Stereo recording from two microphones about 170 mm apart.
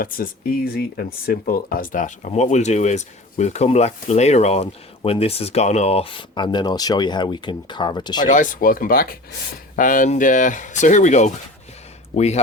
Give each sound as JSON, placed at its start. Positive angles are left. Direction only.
{"t": 0.0, "sound": "speech", "side_deg": 60}
{"t": 8.3, "sound": "speech", "side_deg": 50}